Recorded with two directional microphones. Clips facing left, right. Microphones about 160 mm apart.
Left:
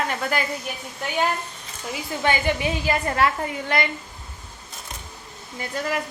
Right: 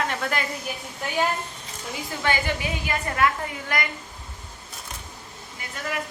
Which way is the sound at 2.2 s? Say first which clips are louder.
Left 3 dB; 20° left (ahead or behind).